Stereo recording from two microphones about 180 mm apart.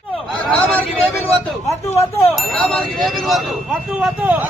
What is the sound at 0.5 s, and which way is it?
Speech, 10° left (ahead or behind).